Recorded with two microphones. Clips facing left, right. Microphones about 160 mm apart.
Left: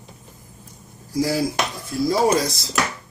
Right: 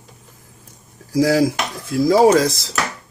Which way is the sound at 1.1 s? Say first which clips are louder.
Right 6 dB; 90° right.